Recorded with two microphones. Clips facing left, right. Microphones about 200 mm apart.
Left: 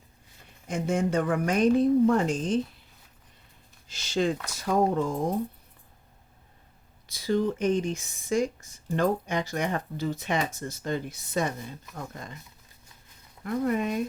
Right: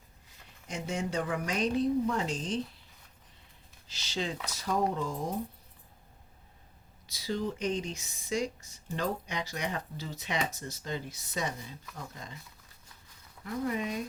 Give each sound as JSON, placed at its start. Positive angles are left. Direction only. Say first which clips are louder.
{"t": 0.7, "sound": "speech", "louder": "left 8 dB", "side_deg": 50}
{"t": 3.8, "sound": "speech", "louder": "left 9 dB", "side_deg": 50}
{"t": 7.1, "sound": "speech", "louder": "left 8 dB", "side_deg": 55}
{"t": 13.4, "sound": "speech", "louder": "left 6 dB", "side_deg": 55}